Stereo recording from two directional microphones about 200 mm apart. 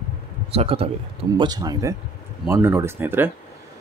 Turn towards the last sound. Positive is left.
turn(degrees=-10)  # may be behind; listen again after turning